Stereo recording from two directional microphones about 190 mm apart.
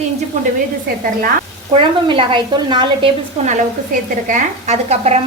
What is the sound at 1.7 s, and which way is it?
Speech, 25° right (ahead or behind).